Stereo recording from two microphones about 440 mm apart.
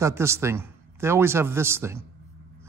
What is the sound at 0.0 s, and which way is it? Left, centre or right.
A man's voice, centre.